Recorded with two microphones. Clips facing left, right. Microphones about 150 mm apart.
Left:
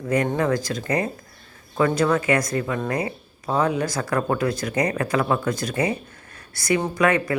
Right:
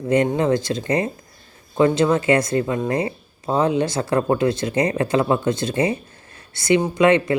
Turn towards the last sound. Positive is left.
turn(degrees=-25)  # may be behind; listen again after turning